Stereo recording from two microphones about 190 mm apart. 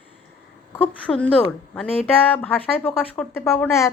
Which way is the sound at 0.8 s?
5° left (ahead or behind).